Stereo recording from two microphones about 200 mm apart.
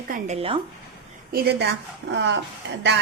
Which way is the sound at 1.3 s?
55° right (ahead or behind).